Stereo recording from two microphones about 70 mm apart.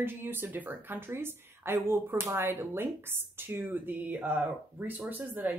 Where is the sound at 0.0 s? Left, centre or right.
Right.